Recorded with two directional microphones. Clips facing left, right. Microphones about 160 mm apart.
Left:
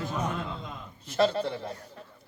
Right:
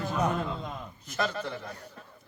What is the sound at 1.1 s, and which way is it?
Speech, 30° left (ahead or behind).